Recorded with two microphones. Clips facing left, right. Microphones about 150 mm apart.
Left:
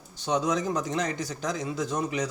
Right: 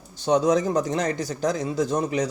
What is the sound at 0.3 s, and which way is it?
A man's voice, 40° right (ahead or behind).